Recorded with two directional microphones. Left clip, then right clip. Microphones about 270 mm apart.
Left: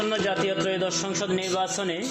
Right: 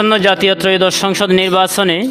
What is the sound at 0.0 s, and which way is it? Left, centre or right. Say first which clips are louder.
A man's voice: right 14 dB; right.